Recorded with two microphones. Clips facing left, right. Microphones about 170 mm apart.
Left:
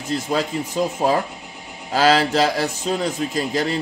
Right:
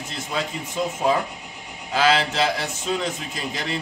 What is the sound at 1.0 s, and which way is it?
A man's voice, 40° left (ahead or behind).